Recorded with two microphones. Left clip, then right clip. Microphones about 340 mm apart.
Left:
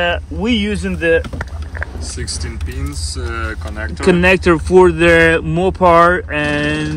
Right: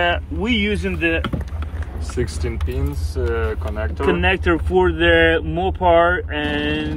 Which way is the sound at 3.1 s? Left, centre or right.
Centre.